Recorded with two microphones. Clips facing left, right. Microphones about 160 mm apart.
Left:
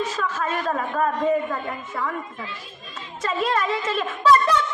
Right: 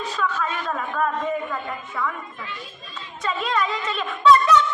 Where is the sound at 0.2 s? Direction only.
35° left (ahead or behind).